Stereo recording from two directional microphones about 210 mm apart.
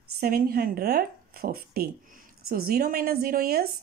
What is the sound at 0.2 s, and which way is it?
Speech, 45° right (ahead or behind).